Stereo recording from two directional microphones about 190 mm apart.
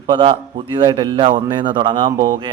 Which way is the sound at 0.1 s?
25° right (ahead or behind).